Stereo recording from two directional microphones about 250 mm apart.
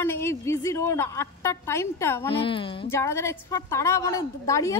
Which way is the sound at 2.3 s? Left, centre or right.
Left.